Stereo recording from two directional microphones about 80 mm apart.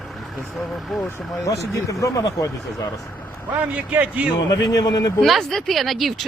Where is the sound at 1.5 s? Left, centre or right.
Left.